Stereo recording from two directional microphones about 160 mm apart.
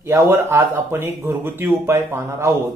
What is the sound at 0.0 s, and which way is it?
Speech, 15° right (ahead or behind).